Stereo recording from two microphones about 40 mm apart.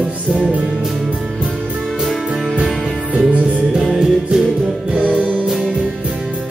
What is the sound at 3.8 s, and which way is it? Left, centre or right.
Music, centre.